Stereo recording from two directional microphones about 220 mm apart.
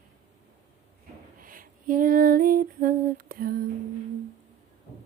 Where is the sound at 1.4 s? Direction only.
40° right (ahead or behind).